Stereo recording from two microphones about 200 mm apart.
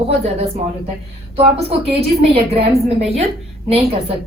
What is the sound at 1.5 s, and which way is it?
A woman's voice, 30° right (ahead or behind).